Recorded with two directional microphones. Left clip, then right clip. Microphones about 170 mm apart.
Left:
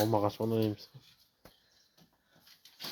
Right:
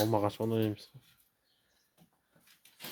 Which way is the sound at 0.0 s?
10° right (ahead or behind).